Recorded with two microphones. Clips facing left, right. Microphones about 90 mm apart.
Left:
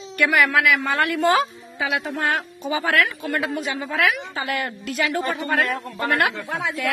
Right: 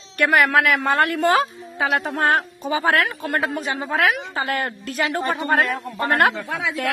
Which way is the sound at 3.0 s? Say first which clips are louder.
Right 2 dB; 45° right (ahead or behind).